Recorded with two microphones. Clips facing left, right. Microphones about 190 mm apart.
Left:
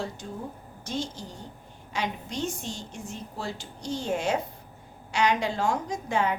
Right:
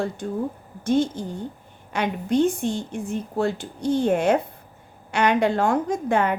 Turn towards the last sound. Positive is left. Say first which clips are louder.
# right 6 dB
turn(degrees=-55)  # may be behind; listen again after turning